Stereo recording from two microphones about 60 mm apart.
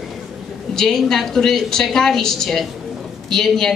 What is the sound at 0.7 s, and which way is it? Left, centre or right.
Speech, centre.